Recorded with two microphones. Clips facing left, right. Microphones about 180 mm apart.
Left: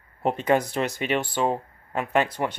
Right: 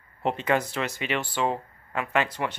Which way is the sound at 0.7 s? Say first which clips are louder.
Left 4 dB; 45° left (ahead or behind).